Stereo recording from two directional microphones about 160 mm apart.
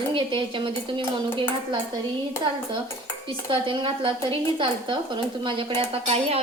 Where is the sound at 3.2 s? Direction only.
30° right (ahead or behind).